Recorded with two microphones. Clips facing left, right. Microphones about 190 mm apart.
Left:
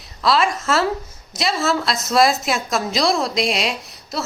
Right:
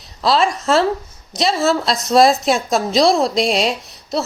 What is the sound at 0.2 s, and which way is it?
A woman's voice, 30° right (ahead or behind).